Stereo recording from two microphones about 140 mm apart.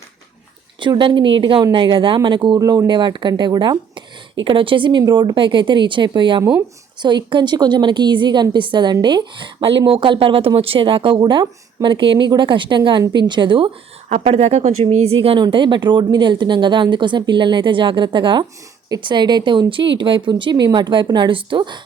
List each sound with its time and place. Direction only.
0.8 s a woman's voice: 35° right (ahead or behind)
14.1 s a woman's voice: 50° right (ahead or behind)